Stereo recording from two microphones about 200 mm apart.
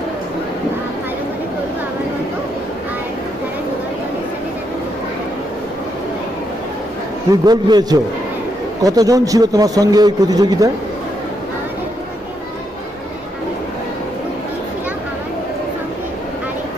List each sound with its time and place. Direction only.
7.4 s a man's voice: 20° right (ahead or behind)